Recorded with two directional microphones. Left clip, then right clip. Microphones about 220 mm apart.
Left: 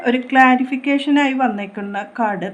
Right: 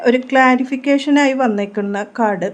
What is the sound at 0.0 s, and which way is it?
A woman's voice, 50° right (ahead or behind).